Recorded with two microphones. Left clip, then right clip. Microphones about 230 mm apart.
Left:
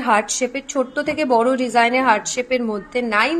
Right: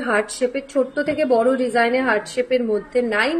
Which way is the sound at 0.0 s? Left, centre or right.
Left.